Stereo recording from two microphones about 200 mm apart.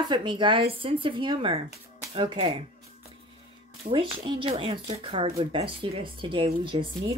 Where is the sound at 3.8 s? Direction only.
25° right (ahead or behind).